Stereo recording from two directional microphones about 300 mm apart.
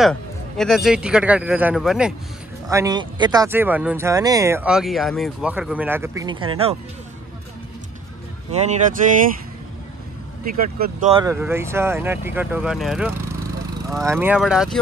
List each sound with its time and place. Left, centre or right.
0.0 s a man's voice: centre
8.5 s speech: right
10.4 s a man's voice: right; by 14.8 s centre